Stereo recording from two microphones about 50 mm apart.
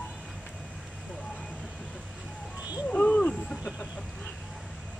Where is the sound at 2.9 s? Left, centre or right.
Left.